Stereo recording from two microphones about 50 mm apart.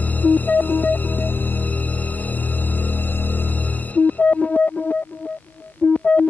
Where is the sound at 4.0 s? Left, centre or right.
Left.